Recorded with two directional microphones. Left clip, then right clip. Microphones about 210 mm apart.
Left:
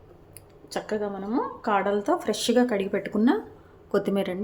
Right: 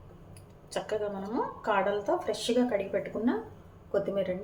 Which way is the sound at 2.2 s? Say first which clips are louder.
Left 5 dB; 55° left (ahead or behind).